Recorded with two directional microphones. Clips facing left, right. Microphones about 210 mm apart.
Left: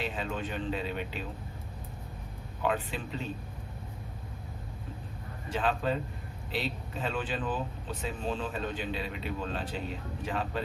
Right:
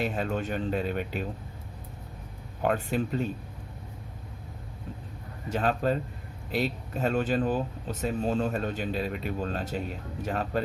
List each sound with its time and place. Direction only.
0.0 s speech: 45° right (ahead or behind)
2.6 s speech: 45° right (ahead or behind)
5.5 s speech: 45° right (ahead or behind)